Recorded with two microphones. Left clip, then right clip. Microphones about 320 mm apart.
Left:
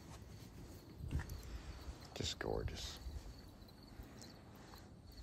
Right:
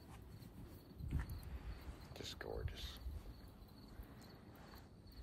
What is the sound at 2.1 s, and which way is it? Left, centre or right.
Speech, left.